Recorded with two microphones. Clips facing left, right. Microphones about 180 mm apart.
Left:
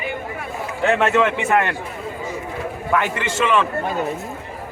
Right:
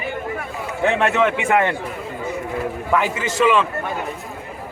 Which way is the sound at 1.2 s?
15° right (ahead or behind).